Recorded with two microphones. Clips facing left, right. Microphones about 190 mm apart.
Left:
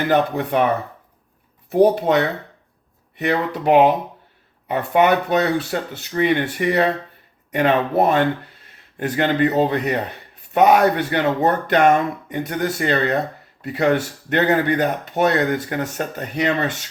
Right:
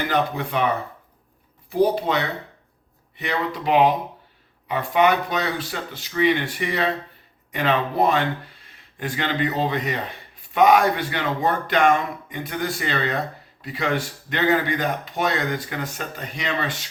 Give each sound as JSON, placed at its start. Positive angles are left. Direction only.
{"t": 0.1, "sound": "speech", "side_deg": 60}
{"t": 1.7, "sound": "speech", "side_deg": 60}